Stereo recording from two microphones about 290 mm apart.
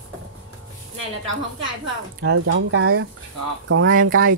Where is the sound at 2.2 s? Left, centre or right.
Right.